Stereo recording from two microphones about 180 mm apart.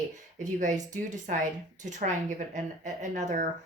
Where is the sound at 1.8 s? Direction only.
40° right (ahead or behind).